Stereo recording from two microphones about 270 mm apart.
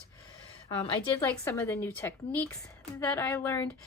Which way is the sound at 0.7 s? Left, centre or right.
Centre.